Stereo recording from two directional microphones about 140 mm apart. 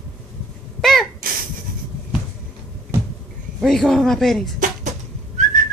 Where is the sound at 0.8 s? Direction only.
Centre (ahead or behind).